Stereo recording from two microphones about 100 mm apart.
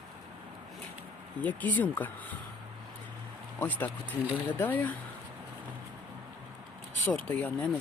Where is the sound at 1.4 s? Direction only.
15° left (ahead or behind).